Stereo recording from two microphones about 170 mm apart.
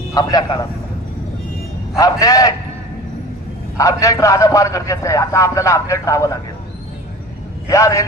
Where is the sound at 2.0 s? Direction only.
20° left (ahead or behind).